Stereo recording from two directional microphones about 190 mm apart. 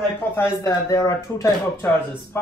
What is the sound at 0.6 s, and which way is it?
Speech, 15° left (ahead or behind).